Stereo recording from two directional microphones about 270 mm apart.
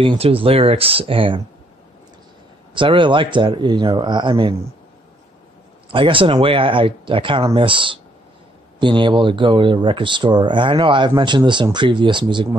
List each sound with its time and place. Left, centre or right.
0.0 s speech: centre
2.7 s speech: centre
5.9 s speech: centre